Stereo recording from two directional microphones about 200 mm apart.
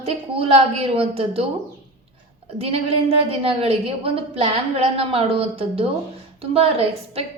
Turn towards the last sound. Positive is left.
turn(degrees=-30)  # may be behind; listen again after turning